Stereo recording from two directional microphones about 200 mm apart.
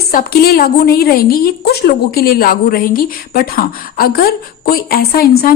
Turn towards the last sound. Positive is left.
turn(degrees=50)  # may be behind; listen again after turning